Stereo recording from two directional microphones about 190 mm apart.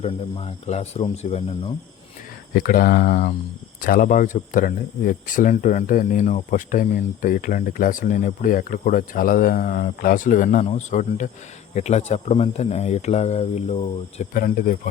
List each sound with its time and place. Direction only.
0.0 s speech: 35° left (ahead or behind)
2.5 s speech: 50° left (ahead or behind); by 14.3 s 35° left (ahead or behind)
14.3 s speech: 50° left (ahead or behind)